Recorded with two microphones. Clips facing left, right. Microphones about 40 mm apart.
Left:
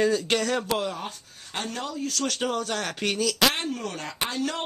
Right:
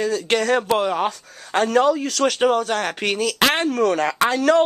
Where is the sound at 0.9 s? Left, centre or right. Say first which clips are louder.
Right 13 dB; right.